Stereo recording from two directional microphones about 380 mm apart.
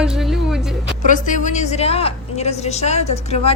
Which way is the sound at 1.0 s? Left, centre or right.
Centre.